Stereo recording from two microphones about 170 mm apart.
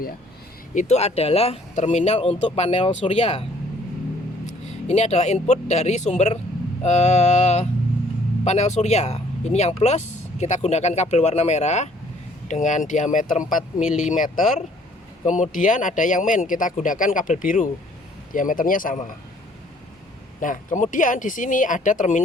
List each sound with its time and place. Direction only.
0.7 s speech: 45° left (ahead or behind)
4.9 s speech: 40° left (ahead or behind)
13.8 s speech: 5° right (ahead or behind)
14.1 s speech: 50° left (ahead or behind)
20.4 s speech: 50° left (ahead or behind)